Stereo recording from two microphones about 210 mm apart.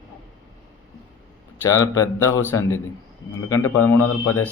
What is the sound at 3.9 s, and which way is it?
Speech, 90° left.